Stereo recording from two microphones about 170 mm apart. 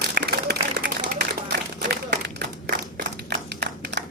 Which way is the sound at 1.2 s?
70° right (ahead or behind).